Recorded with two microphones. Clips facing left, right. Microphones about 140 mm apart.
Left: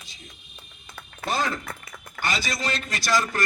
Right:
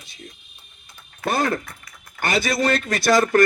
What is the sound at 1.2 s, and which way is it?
A man's voice, 55° right (ahead or behind).